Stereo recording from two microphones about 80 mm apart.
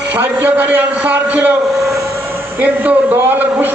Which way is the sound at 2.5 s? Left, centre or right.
Right.